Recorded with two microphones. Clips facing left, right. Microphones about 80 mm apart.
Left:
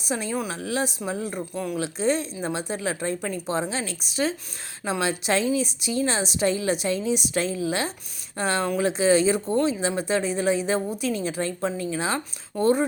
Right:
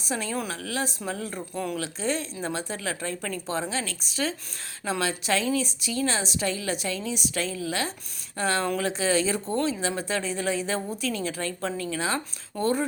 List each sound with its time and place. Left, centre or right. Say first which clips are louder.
0.1 s speech: left 2 dB; centre